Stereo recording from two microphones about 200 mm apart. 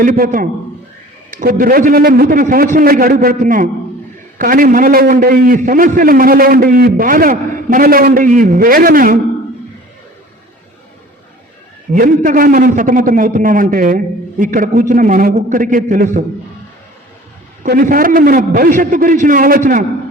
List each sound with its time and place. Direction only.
0.0 s a man's voice: 45° right (ahead or behind)
11.9 s a man's voice: 45° right (ahead or behind)
17.6 s a man's voice: 40° right (ahead or behind)